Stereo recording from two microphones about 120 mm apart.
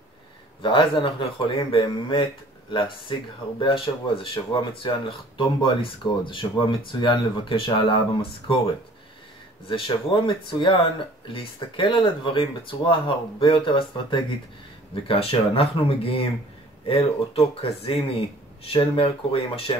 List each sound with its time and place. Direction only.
0.6 s speech: 45° left (ahead or behind)
9.7 s speech: 45° left (ahead or behind)